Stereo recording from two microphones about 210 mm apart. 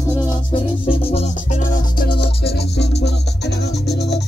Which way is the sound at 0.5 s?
25° left (ahead or behind).